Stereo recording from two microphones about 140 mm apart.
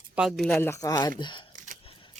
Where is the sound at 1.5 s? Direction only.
65° right (ahead or behind).